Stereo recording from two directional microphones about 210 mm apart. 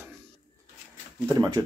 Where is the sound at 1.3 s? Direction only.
15° right (ahead or behind).